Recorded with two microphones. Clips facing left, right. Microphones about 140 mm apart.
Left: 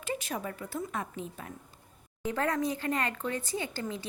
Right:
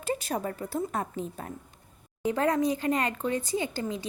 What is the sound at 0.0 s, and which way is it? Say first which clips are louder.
A woman's voice: right 5 dB; 35° right (ahead or behind).